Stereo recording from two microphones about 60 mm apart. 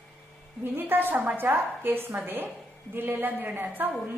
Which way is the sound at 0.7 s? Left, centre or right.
Right.